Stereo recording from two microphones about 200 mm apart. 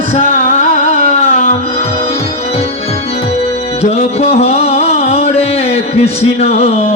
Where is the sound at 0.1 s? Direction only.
30° left (ahead or behind).